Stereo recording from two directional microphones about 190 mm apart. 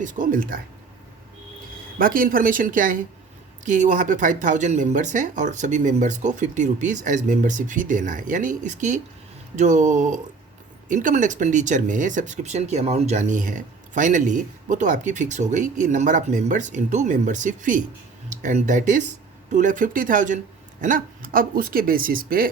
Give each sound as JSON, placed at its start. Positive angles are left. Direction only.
{"t": 0.0, "sound": "speech", "side_deg": -45}
{"t": 2.0, "sound": "speech", "side_deg": -50}